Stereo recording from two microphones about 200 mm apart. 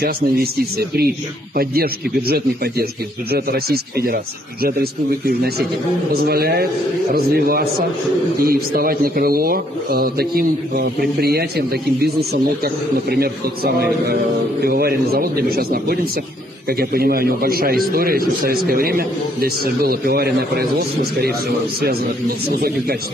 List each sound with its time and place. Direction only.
0.0 s a man's voice: 50° right (ahead or behind)
22.5 s a man's voice: 50° right (ahead or behind)